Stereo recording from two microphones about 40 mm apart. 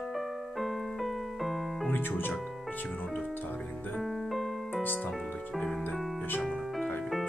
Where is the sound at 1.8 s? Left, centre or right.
Left.